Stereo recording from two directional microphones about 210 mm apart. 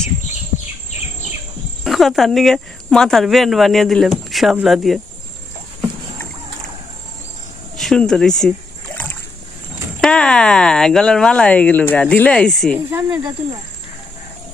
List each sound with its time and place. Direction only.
1.8 s speech: centre (ahead or behind)
7.8 s speech: centre (ahead or behind)
10.0 s speech: 5° left (ahead or behind)
12.9 s speech: 10° right (ahead or behind)